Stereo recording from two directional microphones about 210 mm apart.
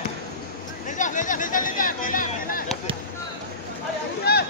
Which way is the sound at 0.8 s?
35° left (ahead or behind).